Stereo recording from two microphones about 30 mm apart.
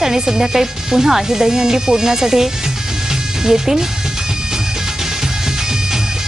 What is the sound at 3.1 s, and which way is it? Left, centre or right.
Music, centre.